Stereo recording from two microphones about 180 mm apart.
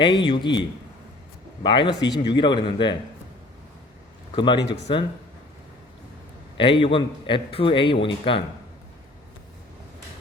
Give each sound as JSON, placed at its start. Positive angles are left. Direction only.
{"t": 0.0, "sound": "a man's voice", "side_deg": 25}
{"t": 1.6, "sound": "a man's voice", "side_deg": 25}
{"t": 4.4, "sound": "a man's voice", "side_deg": 25}
{"t": 6.6, "sound": "a man's voice", "side_deg": 30}